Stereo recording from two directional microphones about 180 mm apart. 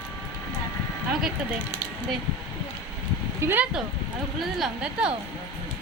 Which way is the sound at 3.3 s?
10° right (ahead or behind).